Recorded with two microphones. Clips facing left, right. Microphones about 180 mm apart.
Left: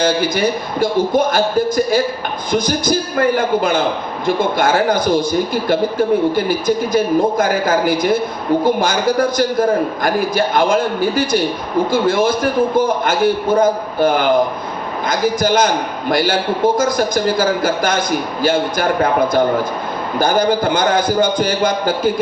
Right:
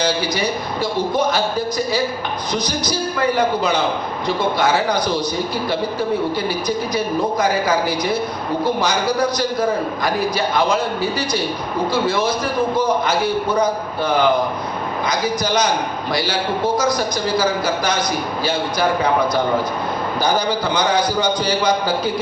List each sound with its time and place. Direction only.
0.0 s a man's voice: 50° left (ahead or behind)
20.1 s a man's voice: 50° left (ahead or behind)